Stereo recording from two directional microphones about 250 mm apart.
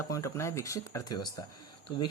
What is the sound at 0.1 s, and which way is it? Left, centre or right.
Speech, centre.